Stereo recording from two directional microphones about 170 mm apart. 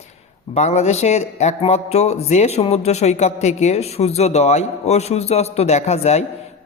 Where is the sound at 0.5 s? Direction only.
40° left (ahead or behind).